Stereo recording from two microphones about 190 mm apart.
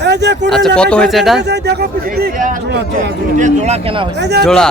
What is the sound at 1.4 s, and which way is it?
Speech, 60° right (ahead or behind).